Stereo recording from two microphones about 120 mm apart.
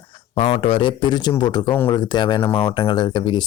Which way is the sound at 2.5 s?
50° left (ahead or behind).